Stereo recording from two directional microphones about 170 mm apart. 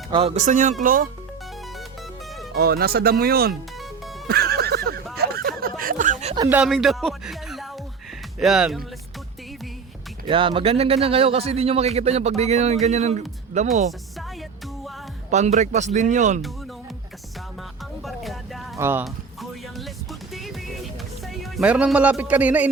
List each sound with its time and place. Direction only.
0.1 s speech: 35° right (ahead or behind); by 1.0 s 50° right (ahead or behind)
2.6 s speech: 65° right (ahead or behind)
4.3 s music: 65° right (ahead or behind)
5.1 s a sound: 65° right (ahead or behind)
6.5 s speech: 5° right (ahead or behind)
10.2 s a man's voice: 30° right (ahead or behind)
15.3 s speech: 45° right (ahead or behind)
18.0 s music: centre (ahead or behind)
18.8 s speech: 15° right (ahead or behind)
19.0 s music: centre (ahead or behind)